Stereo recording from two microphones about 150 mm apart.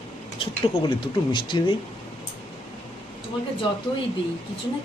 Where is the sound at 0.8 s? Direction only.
30° left (ahead or behind).